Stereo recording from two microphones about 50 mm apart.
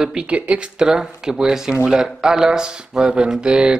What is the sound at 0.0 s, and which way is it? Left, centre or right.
Mantra, centre.